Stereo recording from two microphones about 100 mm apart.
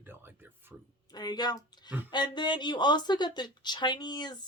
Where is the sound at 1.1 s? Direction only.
45° left (ahead or behind).